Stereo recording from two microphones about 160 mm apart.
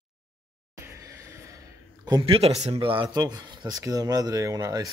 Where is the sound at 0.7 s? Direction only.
20° right (ahead or behind).